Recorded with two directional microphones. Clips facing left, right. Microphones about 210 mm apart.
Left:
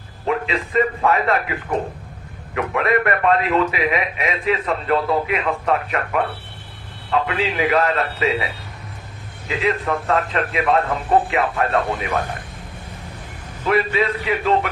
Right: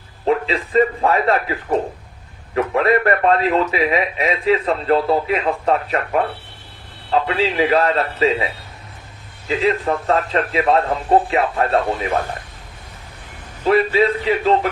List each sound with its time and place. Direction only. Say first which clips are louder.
0.3 s a sound: right 4 dB; 35° right (ahead or behind)
0.7 s a man's voice: right 3 dB; 35° right (ahead or behind)
2.6 s a man's voice: right 3 dB; 35° right (ahead or behind)
9.5 s a man's voice: right 3 dB; 30° right (ahead or behind)
13.7 s a man's voice: right 4 dB; 30° right (ahead or behind)